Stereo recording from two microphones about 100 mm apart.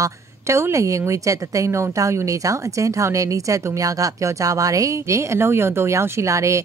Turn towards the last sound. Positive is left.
turn(degrees=-30)  # may be behind; listen again after turning